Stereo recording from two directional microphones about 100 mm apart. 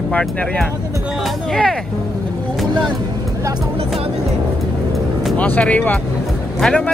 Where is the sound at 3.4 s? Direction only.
40° right (ahead or behind).